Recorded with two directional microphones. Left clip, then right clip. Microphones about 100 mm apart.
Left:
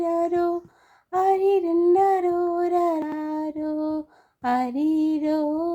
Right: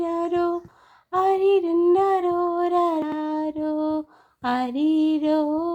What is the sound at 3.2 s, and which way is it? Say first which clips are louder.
Music: right 2 dB; 40° left (ahead or behind).